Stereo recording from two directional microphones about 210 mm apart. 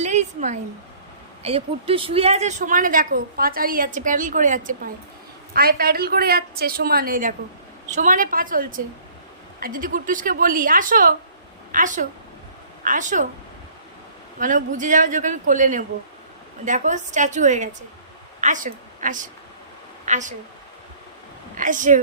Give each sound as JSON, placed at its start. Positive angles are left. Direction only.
{"t": 0.0, "sound": "a sound", "side_deg": -35}
{"t": 1.4, "sound": "a woman's voice", "side_deg": -30}
{"t": 14.3, "sound": "a woman's voice", "side_deg": -40}
{"t": 21.5, "sound": "speech", "side_deg": -40}